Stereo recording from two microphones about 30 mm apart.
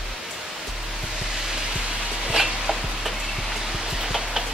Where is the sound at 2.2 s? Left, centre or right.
Centre.